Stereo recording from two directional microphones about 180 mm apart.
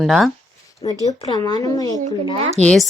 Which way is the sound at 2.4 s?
35° right (ahead or behind).